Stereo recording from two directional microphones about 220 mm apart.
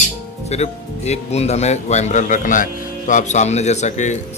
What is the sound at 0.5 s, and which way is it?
Speech, 30° left (ahead or behind).